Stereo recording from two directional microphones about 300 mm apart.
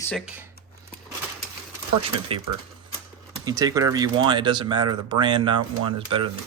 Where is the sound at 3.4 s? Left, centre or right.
Centre.